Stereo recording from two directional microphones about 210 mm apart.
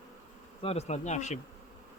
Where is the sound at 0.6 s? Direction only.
30° left (ahead or behind).